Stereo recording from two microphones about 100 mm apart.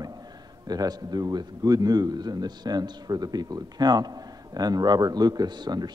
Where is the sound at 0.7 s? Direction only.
40° right (ahead or behind).